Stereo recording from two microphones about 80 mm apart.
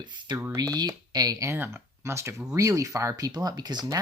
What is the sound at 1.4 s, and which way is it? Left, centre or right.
Speech, right.